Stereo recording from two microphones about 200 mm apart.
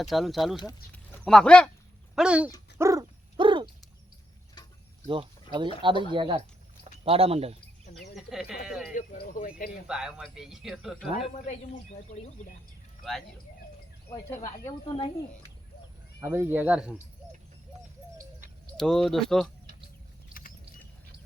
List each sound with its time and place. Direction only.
0.0 s speech: centre (ahead or behind)
2.7 s dog: 15° right (ahead or behind)
5.0 s speech: 25° right (ahead or behind)
8.1 s speech: centre (ahead or behind)
9.0 s speech: 45° left (ahead or behind)
9.8 s speech: 5° right (ahead or behind)
11.3 s a man's voice: 35° left (ahead or behind)
14.1 s speech: 10° left (ahead or behind)
14.8 s speech: 25° left (ahead or behind)
16.2 s speech: 10° right (ahead or behind)
18.8 s speech: centre (ahead or behind)